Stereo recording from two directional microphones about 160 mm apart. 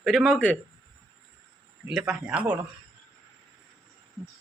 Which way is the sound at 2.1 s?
5° right (ahead or behind).